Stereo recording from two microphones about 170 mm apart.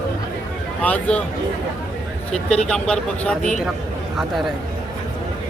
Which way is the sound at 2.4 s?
5° left (ahead or behind).